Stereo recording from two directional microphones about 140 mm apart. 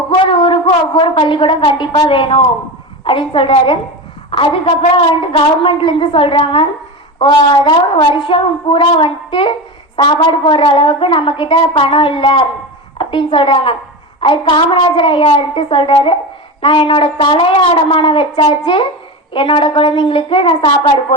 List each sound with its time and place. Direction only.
0.3 s a woman's voice: 40° left (ahead or behind)